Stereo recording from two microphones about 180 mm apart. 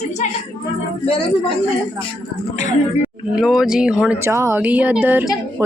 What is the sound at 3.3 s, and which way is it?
Speech, 5° right (ahead or behind).